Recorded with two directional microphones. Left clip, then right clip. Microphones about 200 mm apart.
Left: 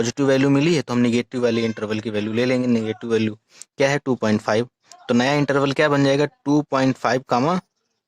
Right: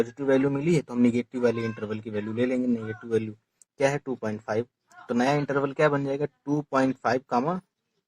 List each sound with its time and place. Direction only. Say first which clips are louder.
0.2 s speech: left 8 dB; 35° left (ahead or behind)